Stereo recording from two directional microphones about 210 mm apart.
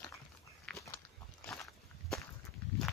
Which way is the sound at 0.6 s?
10° left (ahead or behind).